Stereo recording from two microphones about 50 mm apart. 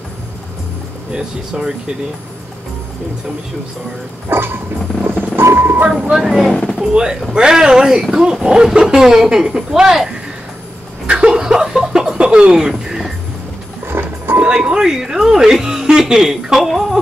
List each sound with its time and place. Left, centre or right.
1.1 s speech: centre
4.3 s dog: right
5.3 s vehicle: right
5.9 s speech: centre
6.2 s speech: centre
6.9 s speech: centre
11.1 s chuckle: centre
13.8 s music: right
14.4 s speech: right